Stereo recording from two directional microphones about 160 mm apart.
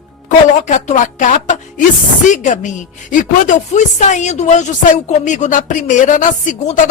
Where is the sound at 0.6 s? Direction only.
50° left (ahead or behind).